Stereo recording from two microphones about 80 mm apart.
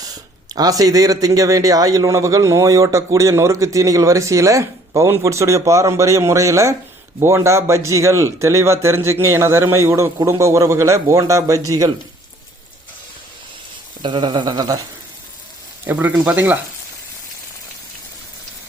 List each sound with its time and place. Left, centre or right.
0.0 s speech: right
14.0 s a sound: right
15.8 s speech: right